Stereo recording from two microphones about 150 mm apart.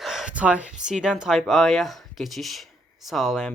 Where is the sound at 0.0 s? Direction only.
Centre (ahead or behind).